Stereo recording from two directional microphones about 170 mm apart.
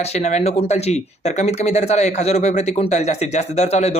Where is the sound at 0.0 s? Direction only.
40° left (ahead or behind).